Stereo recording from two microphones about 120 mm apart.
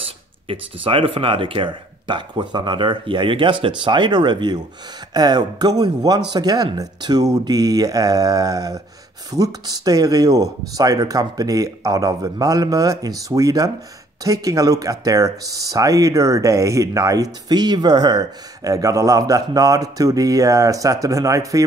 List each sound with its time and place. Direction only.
0.5 s speech: 50° right (ahead or behind); by 21.6 s 30° right (ahead or behind)